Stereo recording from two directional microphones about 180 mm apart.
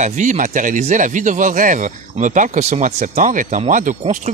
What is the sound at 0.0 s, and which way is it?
Speech, 45° right (ahead or behind).